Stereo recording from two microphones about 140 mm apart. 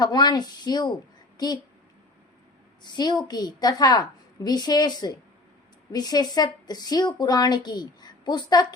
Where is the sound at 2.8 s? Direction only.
30° left (ahead or behind).